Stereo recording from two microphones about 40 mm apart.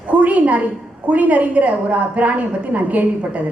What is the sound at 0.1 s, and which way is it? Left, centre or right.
A woman's voice, right.